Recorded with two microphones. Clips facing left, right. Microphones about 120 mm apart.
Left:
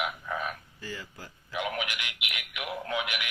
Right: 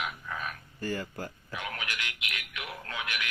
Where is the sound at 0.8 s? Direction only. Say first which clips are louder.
Right 7 dB; 50° right (ahead or behind).